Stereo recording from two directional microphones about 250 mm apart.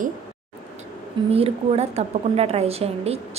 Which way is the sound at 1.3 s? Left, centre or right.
Right.